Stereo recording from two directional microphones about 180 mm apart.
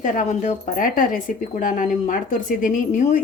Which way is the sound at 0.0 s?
45° left (ahead or behind).